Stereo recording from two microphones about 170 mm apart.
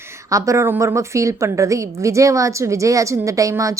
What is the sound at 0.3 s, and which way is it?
A woman's voice, 20° right (ahead or behind).